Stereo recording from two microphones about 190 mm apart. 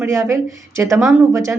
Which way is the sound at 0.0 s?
15° right (ahead or behind).